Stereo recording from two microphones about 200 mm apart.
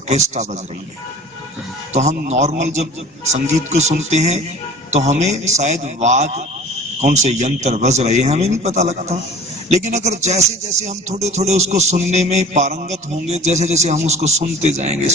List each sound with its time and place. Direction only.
0.1 s a man's voice: 35° right (ahead or behind)
1.9 s a man's voice: 35° right (ahead or behind)